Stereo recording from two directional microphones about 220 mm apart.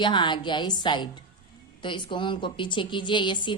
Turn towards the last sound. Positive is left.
turn(degrees=20)  # may be behind; listen again after turning